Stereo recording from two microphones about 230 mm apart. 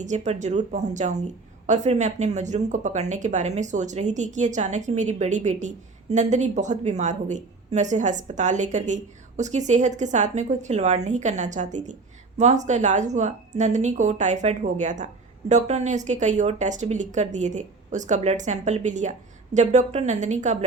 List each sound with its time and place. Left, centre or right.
0.0 s speech: right